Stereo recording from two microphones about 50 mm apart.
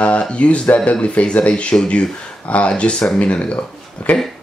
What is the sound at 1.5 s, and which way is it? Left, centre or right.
Speech, centre.